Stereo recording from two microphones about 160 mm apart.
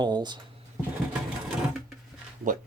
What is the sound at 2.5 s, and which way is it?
Speech, 55° right (ahead or behind).